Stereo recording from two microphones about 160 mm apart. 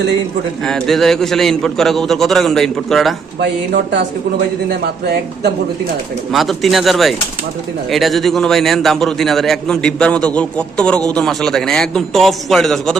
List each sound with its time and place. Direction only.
0.6 s a man's voice: centre (ahead or behind)
4.7 s speech: 90° right
6.3 s a man's voice: centre (ahead or behind)